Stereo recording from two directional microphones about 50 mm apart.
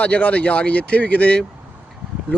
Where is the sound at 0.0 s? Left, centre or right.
Left.